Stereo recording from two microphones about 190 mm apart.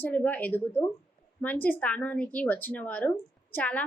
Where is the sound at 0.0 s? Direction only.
10° left (ahead or behind).